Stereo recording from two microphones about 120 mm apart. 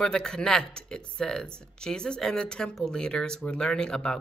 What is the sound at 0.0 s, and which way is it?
Speech, 5° left (ahead or behind).